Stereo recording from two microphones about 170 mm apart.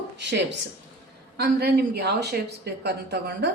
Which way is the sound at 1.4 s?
70° right (ahead or behind).